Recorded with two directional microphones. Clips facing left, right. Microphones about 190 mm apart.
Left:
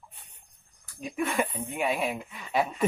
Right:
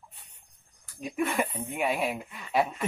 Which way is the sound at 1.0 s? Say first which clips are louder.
Even; centre (ahead or behind).